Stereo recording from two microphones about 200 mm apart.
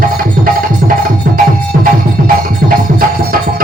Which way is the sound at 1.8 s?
45° right (ahead or behind).